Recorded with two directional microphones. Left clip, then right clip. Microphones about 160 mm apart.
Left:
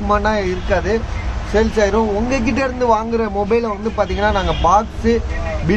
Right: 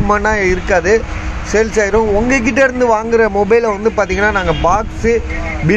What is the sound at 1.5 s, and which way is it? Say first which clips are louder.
Speech: right 2 dB; 15° right (ahead or behind).